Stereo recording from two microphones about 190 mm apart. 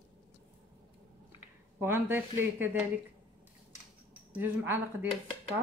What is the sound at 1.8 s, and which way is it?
A woman's voice, 10° right (ahead or behind).